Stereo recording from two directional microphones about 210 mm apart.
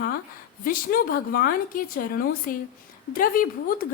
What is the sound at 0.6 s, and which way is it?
A woman's voice, 45° left (ahead or behind).